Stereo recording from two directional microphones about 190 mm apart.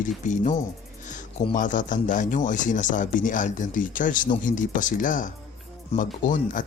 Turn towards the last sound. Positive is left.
turn(degrees=45)  # may be behind; listen again after turning